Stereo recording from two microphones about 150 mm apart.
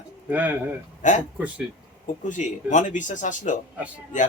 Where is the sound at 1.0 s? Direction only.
55° left (ahead or behind).